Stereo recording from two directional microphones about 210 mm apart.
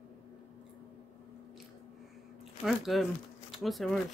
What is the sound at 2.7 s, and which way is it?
Speech, centre (ahead or behind).